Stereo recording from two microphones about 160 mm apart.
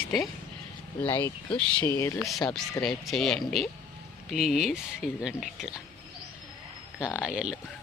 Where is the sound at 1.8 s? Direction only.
15° left (ahead or behind).